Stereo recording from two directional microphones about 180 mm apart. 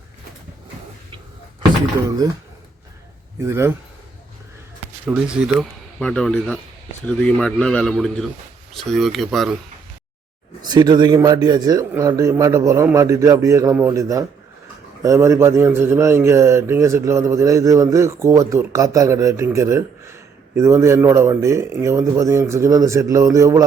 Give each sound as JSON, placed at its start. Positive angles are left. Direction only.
{"t": 3.4, "sound": "speech", "side_deg": -15}
{"t": 5.0, "sound": "speech", "side_deg": -5}
{"t": 10.6, "sound": "speech", "side_deg": -25}